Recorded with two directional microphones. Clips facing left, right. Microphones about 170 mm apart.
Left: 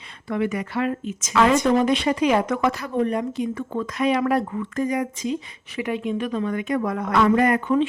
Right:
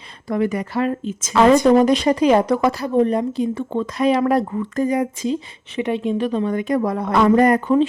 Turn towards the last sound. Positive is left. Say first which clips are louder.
# right 4 dB
turn(degrees=-35)  # may be behind; listen again after turning